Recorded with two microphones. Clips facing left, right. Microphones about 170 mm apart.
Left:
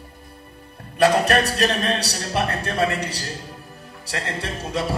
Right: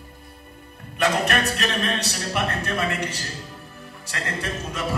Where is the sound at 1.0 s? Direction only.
35° left (ahead or behind).